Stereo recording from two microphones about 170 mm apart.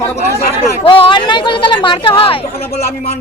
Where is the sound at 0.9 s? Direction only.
30° left (ahead or behind).